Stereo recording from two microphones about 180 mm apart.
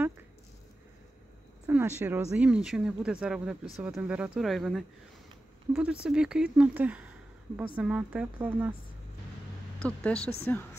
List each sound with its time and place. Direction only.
1.7 s speech: 10° right (ahead or behind)
9.8 s speech: 5° left (ahead or behind)